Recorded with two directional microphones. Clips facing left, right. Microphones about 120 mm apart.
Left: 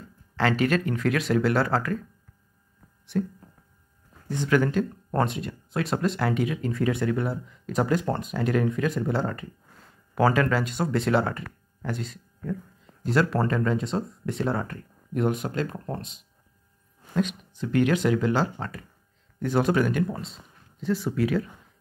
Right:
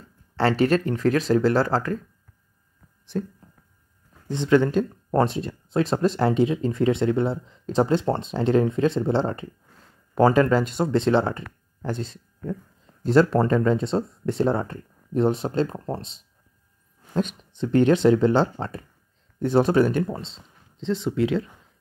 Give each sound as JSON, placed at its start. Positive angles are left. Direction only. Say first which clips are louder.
{"t": 0.4, "sound": "speech", "louder": "right 3 dB", "side_deg": -35}
{"t": 3.1, "sound": "speech", "louder": "left 1 dB", "side_deg": -30}